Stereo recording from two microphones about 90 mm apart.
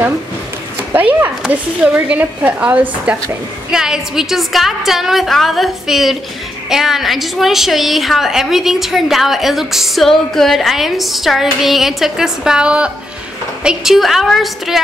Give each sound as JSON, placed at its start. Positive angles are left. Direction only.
{"t": 0.9, "sound": "a woman's voice", "side_deg": -20}